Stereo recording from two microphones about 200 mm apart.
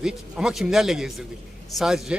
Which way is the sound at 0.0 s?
5° right (ahead or behind).